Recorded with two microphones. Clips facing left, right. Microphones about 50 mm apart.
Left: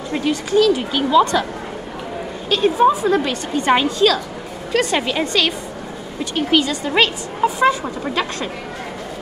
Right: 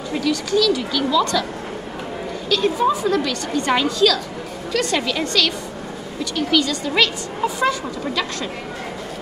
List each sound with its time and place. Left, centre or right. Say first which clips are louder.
0.1 s speech: left 2 dB; left
2.5 s a woman's voice: left 4 dB; left